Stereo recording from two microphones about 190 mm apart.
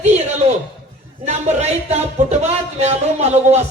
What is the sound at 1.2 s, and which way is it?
Speech, 35° right (ahead or behind).